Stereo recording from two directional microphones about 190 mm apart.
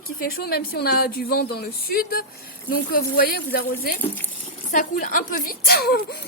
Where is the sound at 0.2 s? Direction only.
50° left (ahead or behind).